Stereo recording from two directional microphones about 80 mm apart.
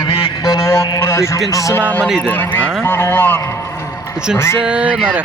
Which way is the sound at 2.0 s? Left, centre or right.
Centre.